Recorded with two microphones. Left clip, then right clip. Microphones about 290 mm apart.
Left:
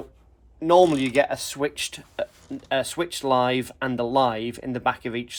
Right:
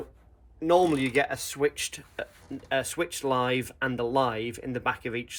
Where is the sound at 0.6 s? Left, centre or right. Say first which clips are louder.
Left 5 dB; left.